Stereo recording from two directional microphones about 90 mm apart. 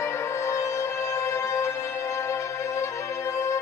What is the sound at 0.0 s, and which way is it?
Music, 30° left (ahead or behind).